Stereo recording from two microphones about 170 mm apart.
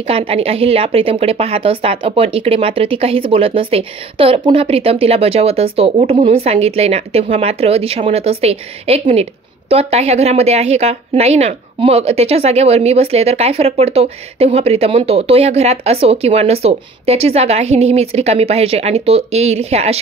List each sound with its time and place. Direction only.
0.0 s a woman's voice: 35° right (ahead or behind)